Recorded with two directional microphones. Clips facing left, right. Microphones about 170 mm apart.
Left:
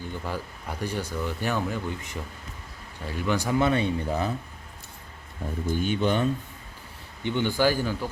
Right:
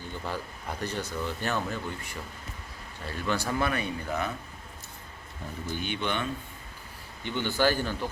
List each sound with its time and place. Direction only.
0.0 s speech: 10° left (ahead or behind)
3.7 s speech: 25° left (ahead or behind)
5.7 s speech: 45° left (ahead or behind)
7.2 s speech: 20° left (ahead or behind)